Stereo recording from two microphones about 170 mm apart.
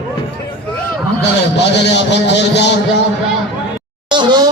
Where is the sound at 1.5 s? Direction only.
90° left.